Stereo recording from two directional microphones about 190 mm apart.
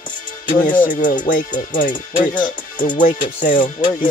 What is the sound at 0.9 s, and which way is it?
Speech, 45° left (ahead or behind).